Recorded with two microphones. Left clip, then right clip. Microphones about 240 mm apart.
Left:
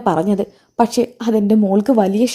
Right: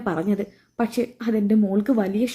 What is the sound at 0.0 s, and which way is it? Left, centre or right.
A woman's voice, left.